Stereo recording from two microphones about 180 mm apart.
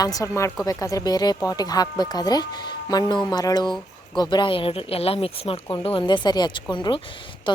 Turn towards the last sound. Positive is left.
turn(degrees=25)  # may be behind; listen again after turning